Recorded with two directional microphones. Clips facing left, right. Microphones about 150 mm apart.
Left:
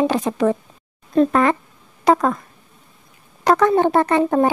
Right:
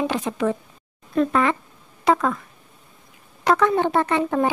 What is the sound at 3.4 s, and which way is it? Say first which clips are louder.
A woman's voice: left 4 dB; 40° left (ahead or behind).